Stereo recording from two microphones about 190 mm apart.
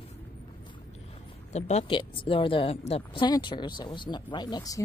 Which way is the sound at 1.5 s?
35° left (ahead or behind).